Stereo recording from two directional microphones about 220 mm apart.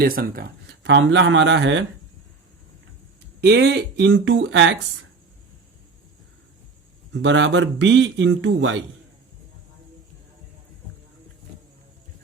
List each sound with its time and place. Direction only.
0.0 s speech: 40° right (ahead or behind)
0.8 s a man's voice: 55° right (ahead or behind)
3.4 s speech: 50° right (ahead or behind)
7.1 s a man's voice: 55° right (ahead or behind)